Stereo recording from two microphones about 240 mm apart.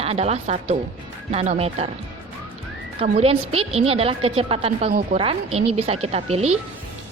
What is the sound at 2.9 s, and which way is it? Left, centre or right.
A woman's voice, right.